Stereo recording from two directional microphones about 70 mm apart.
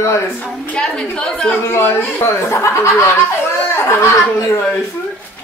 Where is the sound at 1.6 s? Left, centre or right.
Left.